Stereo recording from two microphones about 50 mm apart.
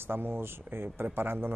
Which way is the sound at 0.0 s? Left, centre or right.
Right.